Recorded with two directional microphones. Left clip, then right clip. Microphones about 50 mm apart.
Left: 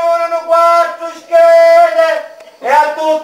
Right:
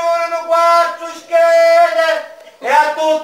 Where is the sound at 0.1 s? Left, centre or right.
Centre.